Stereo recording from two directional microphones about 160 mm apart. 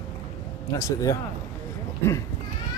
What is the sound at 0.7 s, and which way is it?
Speech, 20° left (ahead or behind).